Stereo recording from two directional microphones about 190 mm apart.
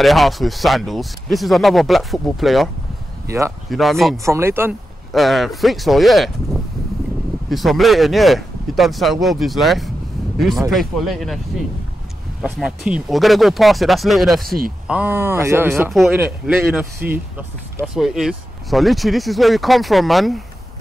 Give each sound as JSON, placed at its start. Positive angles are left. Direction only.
{"t": 0.0, "sound": "speech", "side_deg": 0}
{"t": 3.3, "sound": "speech", "side_deg": -15}
{"t": 3.7, "sound": "speech", "side_deg": 0}
{"t": 4.2, "sound": "speech", "side_deg": -15}
{"t": 5.1, "sound": "speech", "side_deg": 0}
{"t": 12.4, "sound": "speech", "side_deg": -5}
{"t": 15.9, "sound": "speech", "side_deg": 0}